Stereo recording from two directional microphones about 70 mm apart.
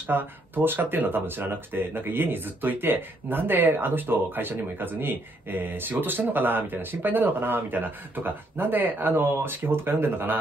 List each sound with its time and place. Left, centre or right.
0.0 s speech: right